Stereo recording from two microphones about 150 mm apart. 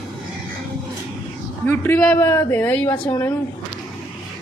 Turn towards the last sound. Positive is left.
turn(degrees=15)  # may be behind; listen again after turning